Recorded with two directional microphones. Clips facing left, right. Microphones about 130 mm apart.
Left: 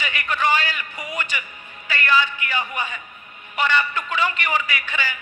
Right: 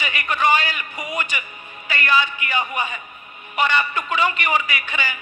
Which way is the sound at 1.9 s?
15° right (ahead or behind).